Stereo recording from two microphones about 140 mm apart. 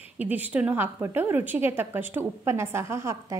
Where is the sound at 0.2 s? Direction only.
10° right (ahead or behind).